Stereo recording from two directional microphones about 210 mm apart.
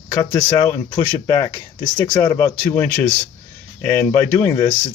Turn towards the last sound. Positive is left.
turn(degrees=10)  # may be behind; listen again after turning